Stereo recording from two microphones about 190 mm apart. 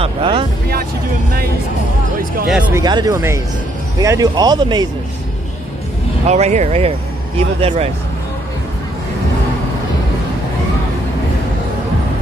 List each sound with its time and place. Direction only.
0.0 s speech: 30° right (ahead or behind)
2.7 s speech: 20° right (ahead or behind)
6.2 s speech: 35° right (ahead or behind)